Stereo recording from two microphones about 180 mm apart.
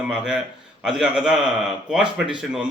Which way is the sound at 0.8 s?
5° right (ahead or behind).